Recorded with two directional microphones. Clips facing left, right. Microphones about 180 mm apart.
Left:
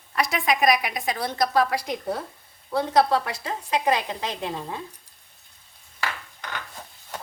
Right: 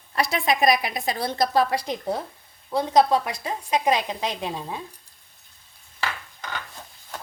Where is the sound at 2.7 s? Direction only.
15° right (ahead or behind).